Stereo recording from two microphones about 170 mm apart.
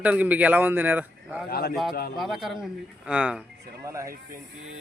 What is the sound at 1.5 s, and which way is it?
Speech, 65° left (ahead or behind).